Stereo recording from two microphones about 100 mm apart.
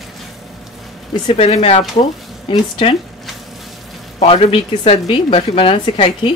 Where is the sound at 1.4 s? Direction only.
80° left.